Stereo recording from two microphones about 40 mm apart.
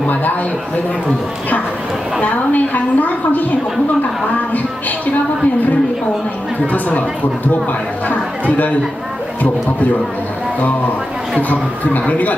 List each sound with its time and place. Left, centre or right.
2.2 s a woman's voice: left